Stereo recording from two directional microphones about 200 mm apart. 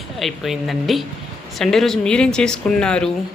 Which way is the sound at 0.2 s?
Centre (ahead or behind).